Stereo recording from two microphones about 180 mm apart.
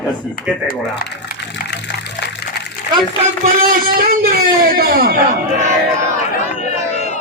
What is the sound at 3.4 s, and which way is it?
A man's voice, 50° right (ahead or behind).